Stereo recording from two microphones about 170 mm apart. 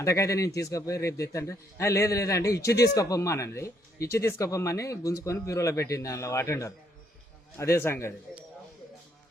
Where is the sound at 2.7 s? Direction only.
80° left.